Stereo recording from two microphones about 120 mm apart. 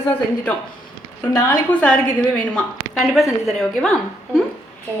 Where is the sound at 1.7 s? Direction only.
10° left (ahead or behind).